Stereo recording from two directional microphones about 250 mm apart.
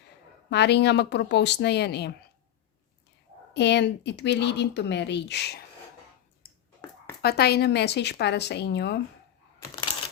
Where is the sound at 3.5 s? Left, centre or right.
Left.